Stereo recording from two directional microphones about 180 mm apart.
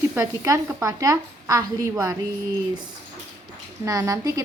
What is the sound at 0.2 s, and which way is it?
A woman's voice, 15° right (ahead or behind).